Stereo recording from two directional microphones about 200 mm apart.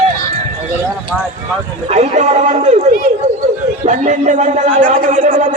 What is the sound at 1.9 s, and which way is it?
Speech, 35° right (ahead or behind).